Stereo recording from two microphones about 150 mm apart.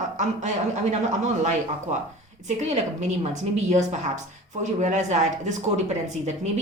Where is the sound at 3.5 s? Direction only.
50° right (ahead or behind).